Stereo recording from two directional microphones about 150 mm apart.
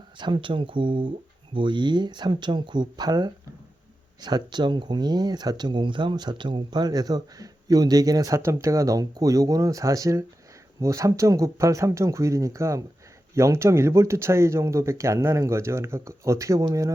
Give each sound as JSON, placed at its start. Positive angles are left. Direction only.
{"t": 0.2, "sound": "speech", "side_deg": -30}